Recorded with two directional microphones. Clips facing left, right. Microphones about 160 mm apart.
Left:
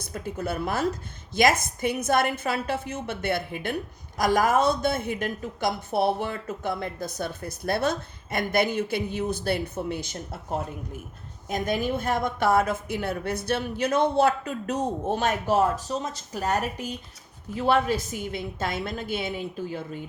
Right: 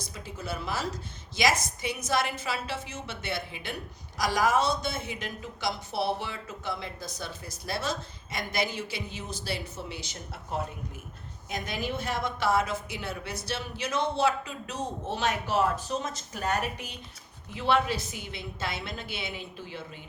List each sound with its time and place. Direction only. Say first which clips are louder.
0.0 s a woman's voice: left 8 dB; 55° left (ahead or behind)